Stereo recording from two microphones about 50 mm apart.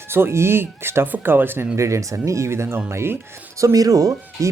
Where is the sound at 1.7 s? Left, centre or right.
Right.